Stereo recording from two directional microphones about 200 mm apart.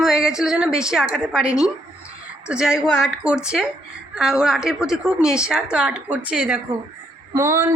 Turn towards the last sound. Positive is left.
turn(degrees=-10)  # may be behind; listen again after turning